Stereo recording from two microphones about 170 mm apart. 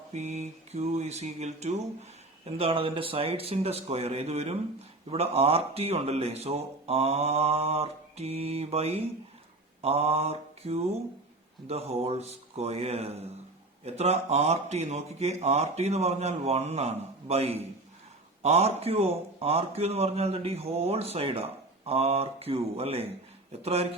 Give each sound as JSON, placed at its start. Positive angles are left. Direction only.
{"t": 0.1, "sound": "a man's voice", "side_deg": -40}